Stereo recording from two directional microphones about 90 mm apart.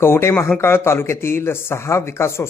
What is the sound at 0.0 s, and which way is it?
Speech, 25° left (ahead or behind).